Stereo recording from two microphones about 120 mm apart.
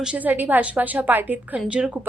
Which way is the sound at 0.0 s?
10° right (ahead or behind).